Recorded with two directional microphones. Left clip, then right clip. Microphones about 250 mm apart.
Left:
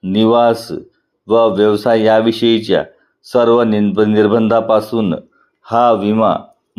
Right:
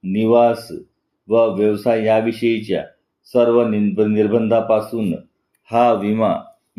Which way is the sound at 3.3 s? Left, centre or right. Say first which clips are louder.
Left 3 dB; left.